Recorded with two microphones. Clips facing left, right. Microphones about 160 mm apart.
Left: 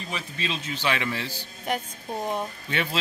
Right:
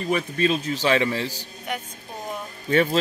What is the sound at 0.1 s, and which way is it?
A man's voice, 50° right (ahead or behind).